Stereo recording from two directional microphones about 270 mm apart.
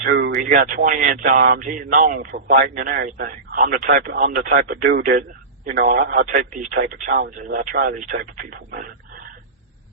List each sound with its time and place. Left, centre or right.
0.0 s speech: right